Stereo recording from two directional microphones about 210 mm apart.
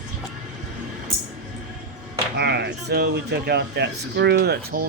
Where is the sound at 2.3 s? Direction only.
50° right (ahead or behind).